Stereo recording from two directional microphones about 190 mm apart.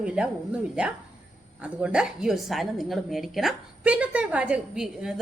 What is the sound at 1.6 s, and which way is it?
A woman's voice, 5° right (ahead or behind).